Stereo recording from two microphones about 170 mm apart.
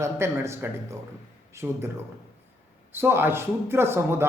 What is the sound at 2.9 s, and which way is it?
Speech, 10° right (ahead or behind).